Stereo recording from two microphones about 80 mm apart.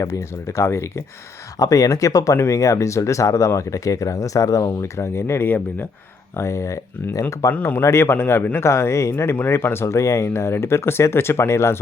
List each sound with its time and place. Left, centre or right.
0.0 s speech: left
1.5 s speech: left
7.5 s speech: left
7.8 s speech: left